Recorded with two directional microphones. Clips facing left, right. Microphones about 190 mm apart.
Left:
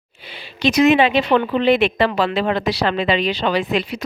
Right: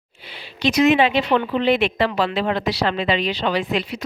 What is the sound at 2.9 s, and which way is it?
Speech, 75° left (ahead or behind).